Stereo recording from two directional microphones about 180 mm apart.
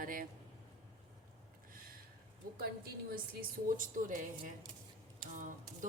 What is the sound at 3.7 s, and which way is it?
A woman's voice, 45° right (ahead or behind).